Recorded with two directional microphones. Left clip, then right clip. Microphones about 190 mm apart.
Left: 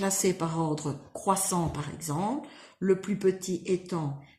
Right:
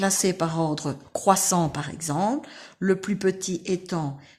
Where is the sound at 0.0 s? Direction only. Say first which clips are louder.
Right 4 dB; 50° right (ahead or behind).